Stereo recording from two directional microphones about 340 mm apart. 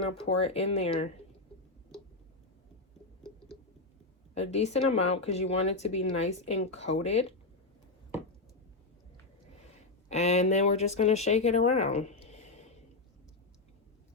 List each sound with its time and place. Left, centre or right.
0.3 s speech: centre
4.4 s speech: centre
10.1 s speech: centre